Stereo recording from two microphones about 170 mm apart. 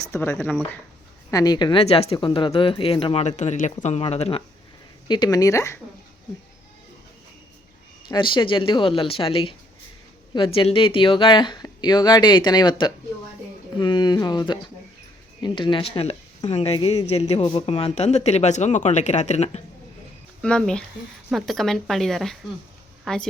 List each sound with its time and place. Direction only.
0.1 s speech: 15° left (ahead or behind)
1.3 s a woman's voice: 20° left (ahead or behind)
5.0 s speech: 25° left (ahead or behind)
8.0 s a woman's voice: 30° left (ahead or behind)
20.4 s speech: 5° left (ahead or behind)